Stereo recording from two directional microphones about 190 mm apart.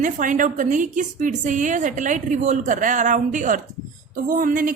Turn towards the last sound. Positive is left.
turn(degrees=-45)  # may be behind; listen again after turning